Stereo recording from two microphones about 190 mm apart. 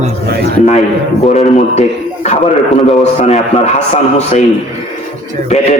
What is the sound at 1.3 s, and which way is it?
A man's voice, 35° left (ahead or behind).